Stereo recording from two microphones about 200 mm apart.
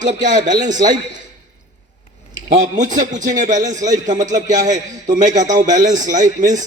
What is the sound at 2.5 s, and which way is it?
A man's voice, 35° right (ahead or behind).